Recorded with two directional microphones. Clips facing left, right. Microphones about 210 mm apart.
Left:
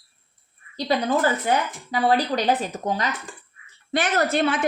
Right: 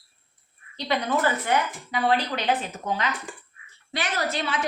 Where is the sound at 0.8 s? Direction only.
35° left (ahead or behind).